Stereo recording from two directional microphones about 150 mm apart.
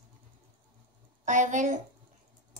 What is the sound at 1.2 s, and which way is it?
Speech, 55° right (ahead or behind).